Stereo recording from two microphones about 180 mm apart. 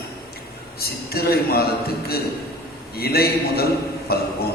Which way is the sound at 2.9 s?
60° left (ahead or behind).